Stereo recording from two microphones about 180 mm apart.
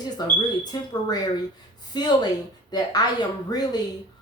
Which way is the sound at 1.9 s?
25° left (ahead or behind).